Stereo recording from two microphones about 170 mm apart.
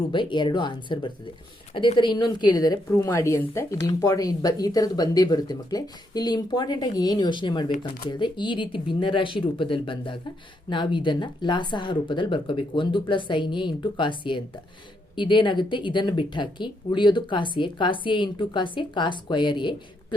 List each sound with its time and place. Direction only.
0.1 s a woman's voice: 30° left (ahead or behind)